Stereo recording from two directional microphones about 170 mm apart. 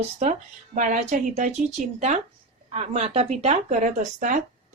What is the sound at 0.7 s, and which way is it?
A woman's voice, 50° right (ahead or behind).